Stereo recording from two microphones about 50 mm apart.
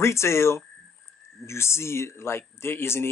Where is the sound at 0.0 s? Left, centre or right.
Left.